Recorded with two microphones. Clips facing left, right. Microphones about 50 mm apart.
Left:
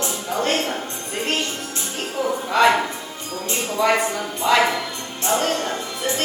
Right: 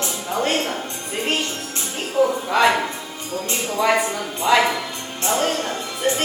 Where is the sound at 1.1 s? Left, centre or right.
Centre.